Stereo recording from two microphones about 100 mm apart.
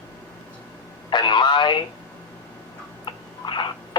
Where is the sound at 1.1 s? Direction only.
50° left (ahead or behind).